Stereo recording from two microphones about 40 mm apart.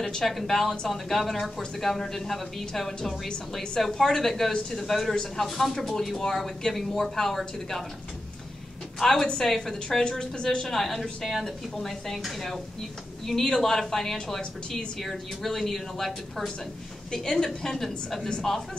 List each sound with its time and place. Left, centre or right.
0.0 s a woman's voice: centre
9.0 s a woman's voice: centre
10.7 s a woman's voice: centre